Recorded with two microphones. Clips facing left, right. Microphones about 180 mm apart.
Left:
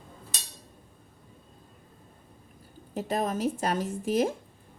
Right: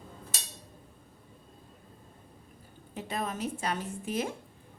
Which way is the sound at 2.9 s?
40° left (ahead or behind).